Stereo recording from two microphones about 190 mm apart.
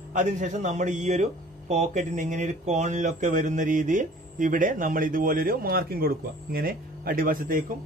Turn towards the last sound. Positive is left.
turn(degrees=-45)  # may be behind; listen again after turning